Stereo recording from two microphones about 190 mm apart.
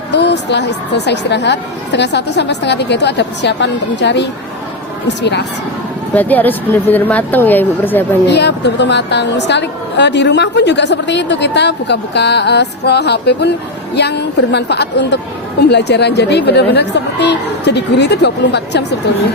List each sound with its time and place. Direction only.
0.1 s a woman's voice: 65° left (ahead or behind)
6.1 s a woman's voice: 10° left (ahead or behind)
8.3 s a woman's voice: 65° left (ahead or behind)